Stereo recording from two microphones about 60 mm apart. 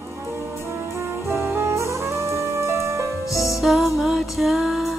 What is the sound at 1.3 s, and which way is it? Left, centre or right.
Music, right.